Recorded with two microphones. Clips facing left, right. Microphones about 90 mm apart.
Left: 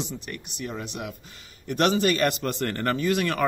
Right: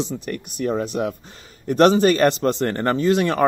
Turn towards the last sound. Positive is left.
turn(degrees=-30)  # may be behind; listen again after turning